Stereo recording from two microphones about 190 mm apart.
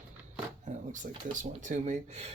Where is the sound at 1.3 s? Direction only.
40° right (ahead or behind).